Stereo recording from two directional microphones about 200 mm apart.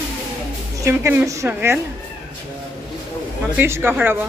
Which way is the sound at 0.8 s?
10° right (ahead or behind).